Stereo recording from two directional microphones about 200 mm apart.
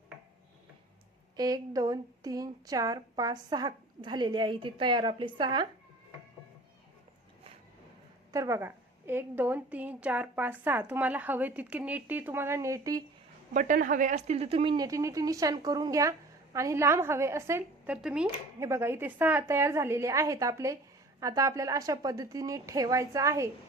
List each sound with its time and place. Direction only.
1.4 s a woman's voice: 20° right (ahead or behind)
8.3 s speech: 15° right (ahead or behind)
13.5 s speech: 40° right (ahead or behind); by 23.5 s 15° right (ahead or behind)